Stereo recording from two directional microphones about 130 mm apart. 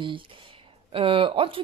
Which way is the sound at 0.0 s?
40° right (ahead or behind).